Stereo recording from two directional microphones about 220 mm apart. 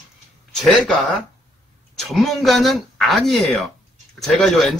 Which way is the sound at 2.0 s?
Centre (ahead or behind).